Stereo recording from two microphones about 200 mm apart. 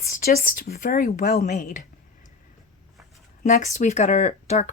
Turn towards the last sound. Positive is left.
turn(degrees=35)  # may be behind; listen again after turning